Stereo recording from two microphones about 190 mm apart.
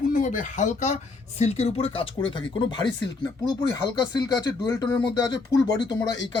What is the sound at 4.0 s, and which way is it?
Speech, 20° left (ahead or behind).